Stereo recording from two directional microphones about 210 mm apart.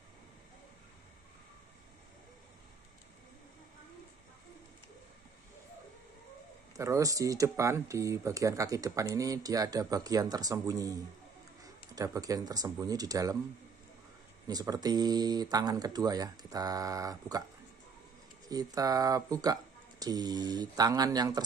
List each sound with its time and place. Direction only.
6.8 s speech: 15° right (ahead or behind)
14.5 s speech: 20° right (ahead or behind)
18.5 s speech: 20° right (ahead or behind)